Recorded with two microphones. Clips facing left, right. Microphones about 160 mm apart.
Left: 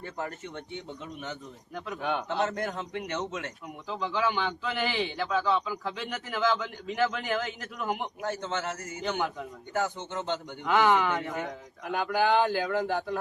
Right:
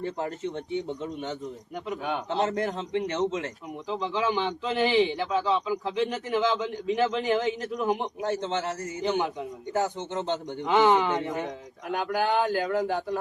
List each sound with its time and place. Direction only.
0.0 s a man's voice: 30° right (ahead or behind)
9.7 s a man's voice: 35° right (ahead or behind)
11.9 s speech: centre (ahead or behind)